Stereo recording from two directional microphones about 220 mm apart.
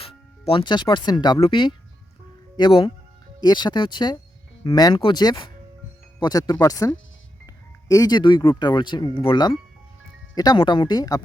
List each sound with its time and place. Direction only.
0.0 s speech: 25° left (ahead or behind)